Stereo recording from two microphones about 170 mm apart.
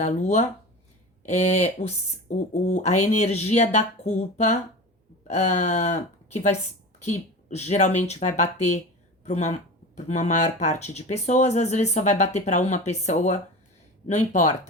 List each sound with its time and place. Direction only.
0.0 s speech: 40° left (ahead or behind)